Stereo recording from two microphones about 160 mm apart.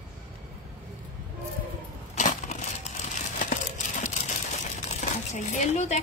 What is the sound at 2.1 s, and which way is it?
Crumpling, 50° left (ahead or behind).